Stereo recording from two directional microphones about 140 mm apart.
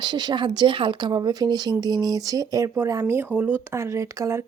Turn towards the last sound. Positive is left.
turn(degrees=-20)  # may be behind; listen again after turning